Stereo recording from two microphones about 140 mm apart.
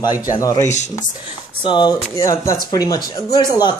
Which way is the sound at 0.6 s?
55° left (ahead or behind).